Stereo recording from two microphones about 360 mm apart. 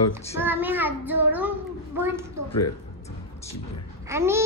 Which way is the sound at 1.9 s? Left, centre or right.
Centre.